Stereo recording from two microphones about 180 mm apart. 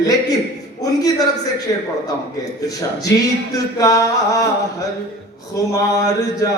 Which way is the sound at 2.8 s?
20° left (ahead or behind).